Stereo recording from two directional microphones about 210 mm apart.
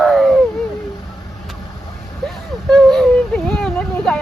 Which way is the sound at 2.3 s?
Centre (ahead or behind).